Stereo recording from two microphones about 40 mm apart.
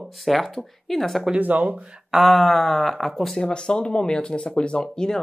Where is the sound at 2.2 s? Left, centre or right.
Centre.